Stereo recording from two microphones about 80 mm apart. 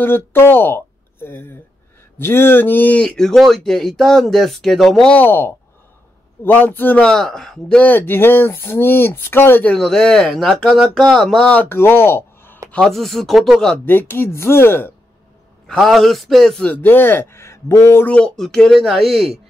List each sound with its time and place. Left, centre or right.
0.0 s speech: left; by 5.1 s centre
5.1 s speech: left
7.0 s speech: centre
7.8 s speech: left
9.7 s speech: centre
11.5 s speech: left
12.8 s speech: centre
13.8 s speech: left
15.6 s speech: centre
16.6 s speech: left
18.0 s speech: centre